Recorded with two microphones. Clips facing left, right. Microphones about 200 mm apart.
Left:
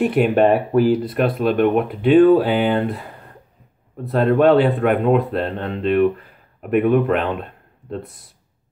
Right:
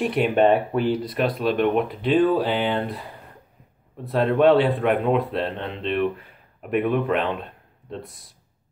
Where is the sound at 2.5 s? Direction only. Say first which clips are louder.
Left 5 dB; 50° left (ahead or behind).